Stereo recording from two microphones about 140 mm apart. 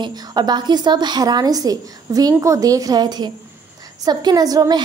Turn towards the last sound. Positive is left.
turn(degrees=-25)  # may be behind; listen again after turning